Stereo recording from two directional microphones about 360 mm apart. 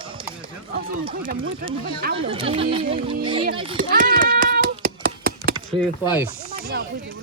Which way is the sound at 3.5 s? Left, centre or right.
Centre.